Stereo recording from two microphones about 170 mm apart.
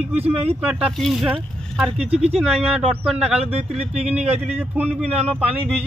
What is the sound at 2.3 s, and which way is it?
Speech, 5° right (ahead or behind).